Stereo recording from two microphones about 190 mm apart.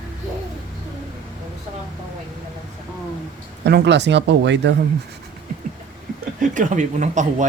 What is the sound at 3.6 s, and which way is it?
Speech, 65° right (ahead or behind).